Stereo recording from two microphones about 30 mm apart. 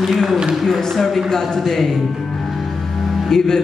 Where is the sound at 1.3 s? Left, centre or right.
Centre.